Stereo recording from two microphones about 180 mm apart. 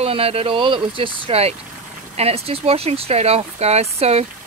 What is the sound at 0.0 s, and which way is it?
Speech, 35° right (ahead or behind).